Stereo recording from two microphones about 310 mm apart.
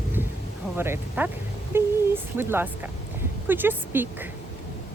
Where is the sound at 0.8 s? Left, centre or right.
Centre.